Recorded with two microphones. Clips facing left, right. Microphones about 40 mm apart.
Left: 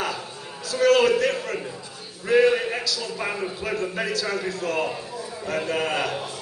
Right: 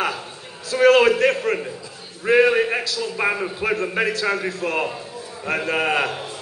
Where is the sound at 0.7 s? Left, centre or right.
Right.